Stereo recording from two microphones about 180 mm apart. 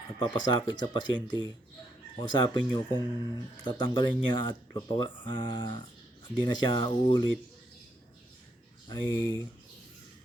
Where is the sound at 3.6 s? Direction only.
25° left (ahead or behind).